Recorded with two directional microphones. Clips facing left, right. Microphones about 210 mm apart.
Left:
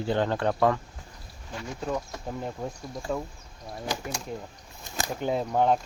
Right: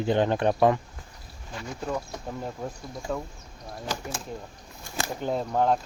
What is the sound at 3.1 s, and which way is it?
Speech, centre (ahead or behind).